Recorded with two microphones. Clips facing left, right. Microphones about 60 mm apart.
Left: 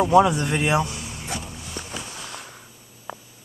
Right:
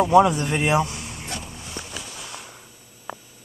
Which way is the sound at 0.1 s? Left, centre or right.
Centre.